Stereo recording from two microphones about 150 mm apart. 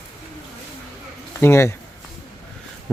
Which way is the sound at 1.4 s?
15° left (ahead or behind).